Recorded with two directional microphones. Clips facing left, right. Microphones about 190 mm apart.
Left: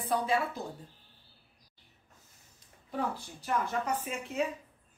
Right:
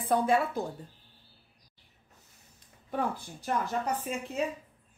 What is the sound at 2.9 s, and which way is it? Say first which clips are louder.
Speech: right 2 dB; 55° right (ahead or behind).